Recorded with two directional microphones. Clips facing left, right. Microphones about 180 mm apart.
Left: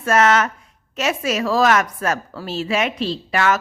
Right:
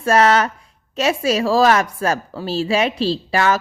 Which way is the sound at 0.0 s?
35° right (ahead or behind).